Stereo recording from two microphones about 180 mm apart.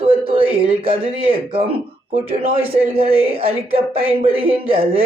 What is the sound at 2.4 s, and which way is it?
Speech, 35° right (ahead or behind).